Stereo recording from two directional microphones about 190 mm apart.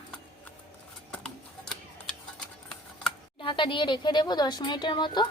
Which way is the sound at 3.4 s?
25° left (ahead or behind).